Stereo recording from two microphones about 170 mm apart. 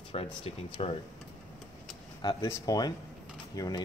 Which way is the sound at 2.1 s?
25° left (ahead or behind).